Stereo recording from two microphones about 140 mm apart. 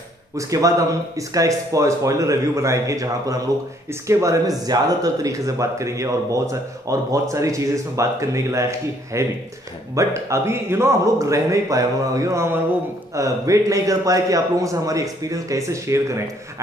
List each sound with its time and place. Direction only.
0.4 s speech: 25° right (ahead or behind)